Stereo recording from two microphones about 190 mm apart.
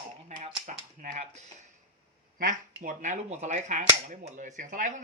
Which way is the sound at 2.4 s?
45° right (ahead or behind).